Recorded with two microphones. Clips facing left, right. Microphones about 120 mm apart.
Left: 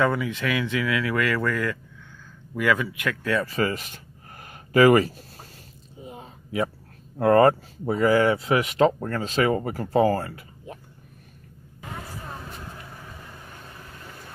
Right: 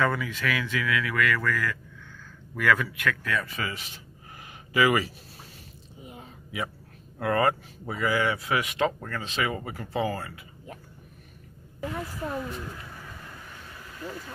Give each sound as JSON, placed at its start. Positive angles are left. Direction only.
{"t": 0.0, "sound": "speech", "side_deg": 20}
{"t": 3.5, "sound": "speech", "side_deg": 45}
{"t": 7.2, "sound": "speech", "side_deg": 40}